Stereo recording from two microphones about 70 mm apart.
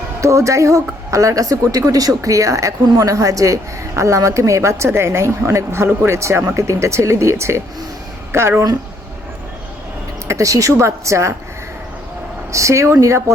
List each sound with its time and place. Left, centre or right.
0.2 s a woman's voice: right
10.2 s a woman's voice: right
12.5 s a woman's voice: right